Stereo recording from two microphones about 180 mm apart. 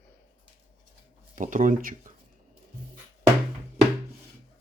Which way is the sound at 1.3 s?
45° right (ahead or behind).